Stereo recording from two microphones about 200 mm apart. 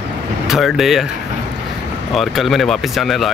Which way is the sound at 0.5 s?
Centre (ahead or behind).